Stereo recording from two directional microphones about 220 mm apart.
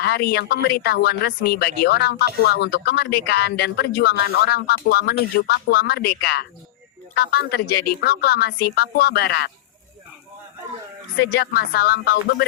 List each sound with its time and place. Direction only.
0.0 s speech: 45° left (ahead or behind)
11.2 s speech: 45° left (ahead or behind)